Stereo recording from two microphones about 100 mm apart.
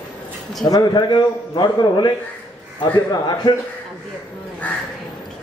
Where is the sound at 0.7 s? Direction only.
45° left (ahead or behind).